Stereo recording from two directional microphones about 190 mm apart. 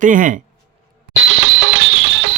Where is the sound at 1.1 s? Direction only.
85° right.